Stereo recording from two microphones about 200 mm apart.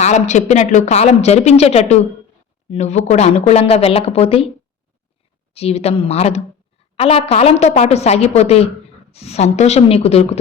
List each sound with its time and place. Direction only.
0.0 s speech: 35° left (ahead or behind)
5.5 s speech: 30° left (ahead or behind)